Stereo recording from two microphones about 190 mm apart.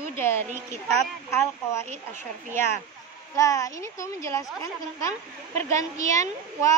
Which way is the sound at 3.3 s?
15° left (ahead or behind).